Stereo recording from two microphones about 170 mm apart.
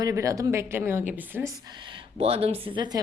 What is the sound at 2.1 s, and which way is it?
Speech, 35° right (ahead or behind).